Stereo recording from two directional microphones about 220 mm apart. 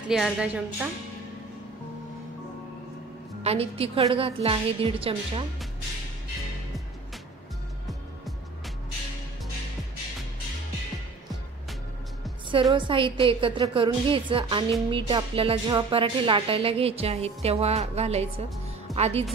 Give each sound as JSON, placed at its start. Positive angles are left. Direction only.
{"t": 0.1, "sound": "a woman's voice", "side_deg": -5}
{"t": 3.4, "sound": "a woman's voice", "side_deg": -25}
{"t": 12.7, "sound": "a woman's voice", "side_deg": -20}